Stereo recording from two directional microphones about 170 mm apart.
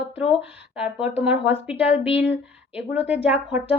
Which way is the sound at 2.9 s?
10° right (ahead or behind).